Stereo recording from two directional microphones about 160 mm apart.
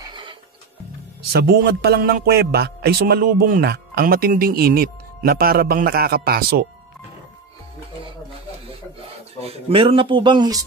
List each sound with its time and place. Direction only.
0.1 s music: 30° right (ahead or behind)
1.3 s speech: 90° right; by 6.6 s 75° right (ahead or behind)
9.4 s speech: 40° right (ahead or behind)